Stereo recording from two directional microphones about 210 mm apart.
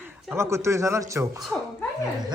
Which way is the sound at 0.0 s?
10° right (ahead or behind).